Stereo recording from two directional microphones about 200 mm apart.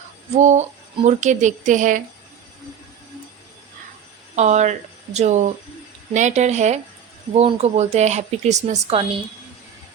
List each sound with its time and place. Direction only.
0.3 s a woman's voice: 35° right (ahead or behind)
4.4 s a woman's voice: 35° right (ahead or behind)